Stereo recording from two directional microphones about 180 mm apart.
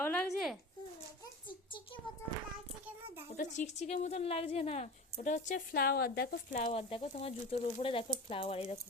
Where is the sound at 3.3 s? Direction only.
40° left (ahead or behind); by 6.4 s 60° left (ahead or behind).